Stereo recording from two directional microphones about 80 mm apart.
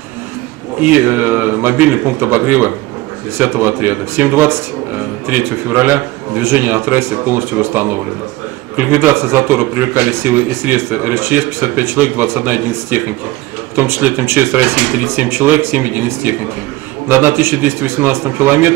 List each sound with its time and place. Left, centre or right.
0.8 s speech: right
5.7 s speech: right
17.1 s speech: right